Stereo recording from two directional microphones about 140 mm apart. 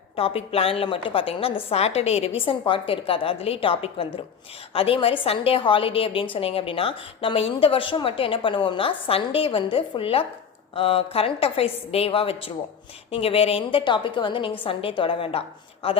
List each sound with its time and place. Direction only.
0.2 s a woman's voice: 45° left (ahead or behind)